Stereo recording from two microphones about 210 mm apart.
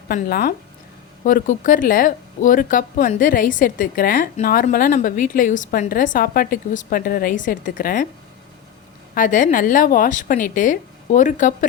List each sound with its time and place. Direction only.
0.1 s speech: 45° left (ahead or behind)
9.1 s speech: 40° left (ahead or behind)